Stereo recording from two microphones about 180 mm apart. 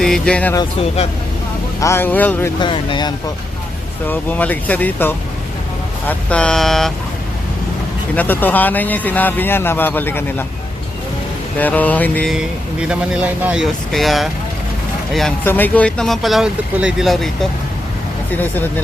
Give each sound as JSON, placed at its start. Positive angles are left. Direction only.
{"t": 0.0, "sound": "speech", "side_deg": 5}
{"t": 0.5, "sound": "speech", "side_deg": 25}
{"t": 1.8, "sound": "speech", "side_deg": 15}
{"t": 2.6, "sound": "speech", "side_deg": 25}
{"t": 4.0, "sound": "speech", "side_deg": 10}
{"t": 8.1, "sound": "speech", "side_deg": 10}
{"t": 11.5, "sound": "speech", "side_deg": 10}
{"t": 12.9, "sound": "speech", "side_deg": -5}
{"t": 15.4, "sound": "speech", "side_deg": 10}
{"t": 18.3, "sound": "speech", "side_deg": 10}